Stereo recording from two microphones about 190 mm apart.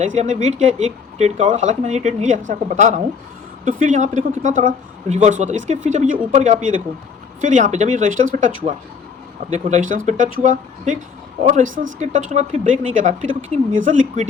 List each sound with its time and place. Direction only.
0.0 s speech: 35° right (ahead or behind)